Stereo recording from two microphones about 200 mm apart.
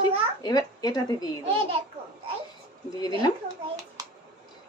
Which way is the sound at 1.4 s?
30° right (ahead or behind).